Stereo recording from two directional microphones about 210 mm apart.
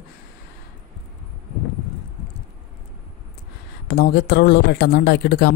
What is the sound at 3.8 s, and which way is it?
Speech, 55° left (ahead or behind).